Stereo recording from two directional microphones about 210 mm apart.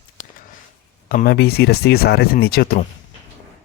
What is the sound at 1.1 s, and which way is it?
Speech, 45° left (ahead or behind).